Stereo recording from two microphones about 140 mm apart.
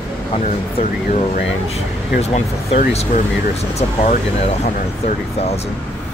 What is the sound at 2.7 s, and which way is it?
Speech, 65° left (ahead or behind).